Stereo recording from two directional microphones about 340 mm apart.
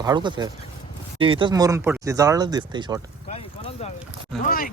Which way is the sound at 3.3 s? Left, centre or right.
Centre.